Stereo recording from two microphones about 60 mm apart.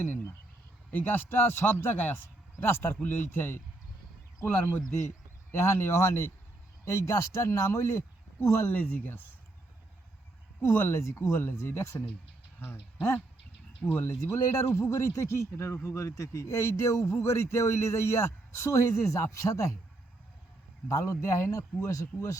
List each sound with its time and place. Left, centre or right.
0.0 s a man's voice: left
5.5 s speech: left
6.8 s speech: left
8.7 s a man's voice: left
10.6 s speech: left
12.5 s speech: left
20.8 s speech: left